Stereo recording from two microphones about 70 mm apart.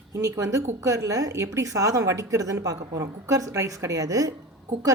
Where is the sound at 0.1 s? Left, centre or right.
Right.